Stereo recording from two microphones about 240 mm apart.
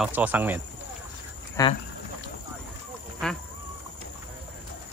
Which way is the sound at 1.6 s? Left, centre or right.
Centre.